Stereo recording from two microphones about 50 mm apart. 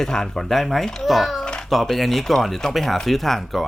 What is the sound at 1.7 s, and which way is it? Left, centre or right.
Speech, centre.